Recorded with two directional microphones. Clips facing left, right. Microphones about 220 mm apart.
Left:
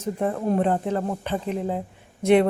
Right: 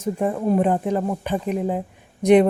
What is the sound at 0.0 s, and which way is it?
A woman's voice, 10° right (ahead or behind).